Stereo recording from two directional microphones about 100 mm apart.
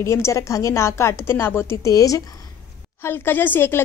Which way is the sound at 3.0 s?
20° left (ahead or behind).